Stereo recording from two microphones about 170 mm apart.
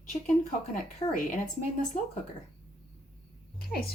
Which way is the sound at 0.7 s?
50° left (ahead or behind).